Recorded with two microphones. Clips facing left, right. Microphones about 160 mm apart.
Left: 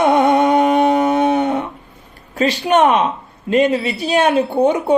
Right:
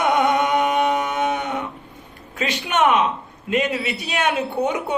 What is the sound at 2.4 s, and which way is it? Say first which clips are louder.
Speech: left 6 dB; 35° left (ahead or behind).